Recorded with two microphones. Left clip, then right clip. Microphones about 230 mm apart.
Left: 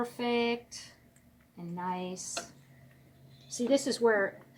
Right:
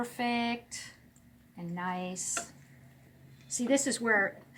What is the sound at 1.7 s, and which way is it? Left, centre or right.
Speech, centre.